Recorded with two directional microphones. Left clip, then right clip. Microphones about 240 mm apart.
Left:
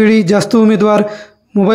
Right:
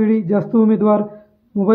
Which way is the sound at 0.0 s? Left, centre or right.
Left.